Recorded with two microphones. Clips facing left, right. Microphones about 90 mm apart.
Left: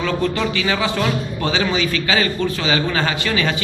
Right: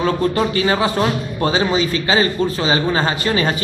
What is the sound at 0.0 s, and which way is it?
A man's voice, 35° right (ahead or behind).